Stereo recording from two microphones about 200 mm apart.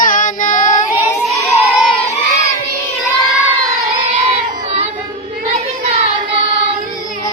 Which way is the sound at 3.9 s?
30° right (ahead or behind).